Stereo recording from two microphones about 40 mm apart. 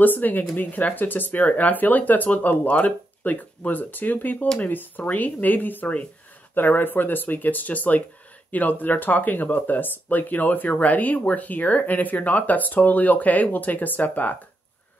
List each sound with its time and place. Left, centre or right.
0.0 s speech: left